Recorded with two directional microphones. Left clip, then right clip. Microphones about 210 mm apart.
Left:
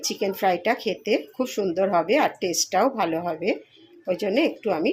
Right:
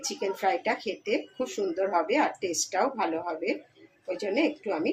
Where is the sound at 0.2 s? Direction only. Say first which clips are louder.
Left 4 dB; 45° left (ahead or behind).